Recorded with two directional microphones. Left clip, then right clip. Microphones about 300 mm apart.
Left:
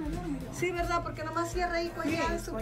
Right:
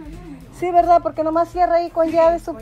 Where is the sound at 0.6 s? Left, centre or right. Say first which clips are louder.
Right 17 dB; centre.